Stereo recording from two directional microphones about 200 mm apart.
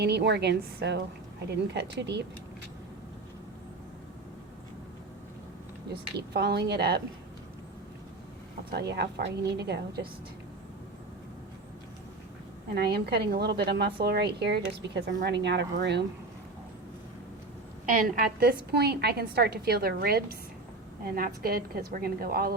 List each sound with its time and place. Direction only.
0.0 s a woman's voice: 55° right (ahead or behind)
5.9 s a woman's voice: 55° right (ahead or behind)
8.9 s a woman's voice: 55° right (ahead or behind)
12.7 s a woman's voice: 50° right (ahead or behind)
17.8 s a woman's voice: 40° right (ahead or behind)